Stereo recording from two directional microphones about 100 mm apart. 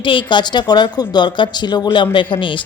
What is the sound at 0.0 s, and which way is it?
Speech, 55° left (ahead or behind).